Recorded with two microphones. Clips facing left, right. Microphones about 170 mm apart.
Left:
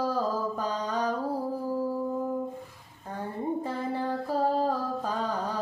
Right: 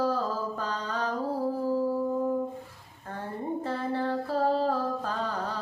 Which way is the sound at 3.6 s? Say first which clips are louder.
Right 1 dB; 15° left (ahead or behind).